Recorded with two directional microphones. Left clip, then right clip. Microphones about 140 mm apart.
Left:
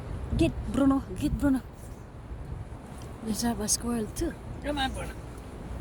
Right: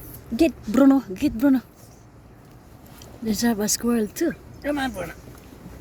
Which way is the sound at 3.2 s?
40° right (ahead or behind).